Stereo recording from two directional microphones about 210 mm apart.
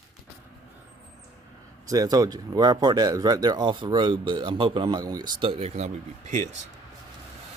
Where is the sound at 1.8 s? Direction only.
15° right (ahead or behind); by 6.4 s 35° right (ahead or behind).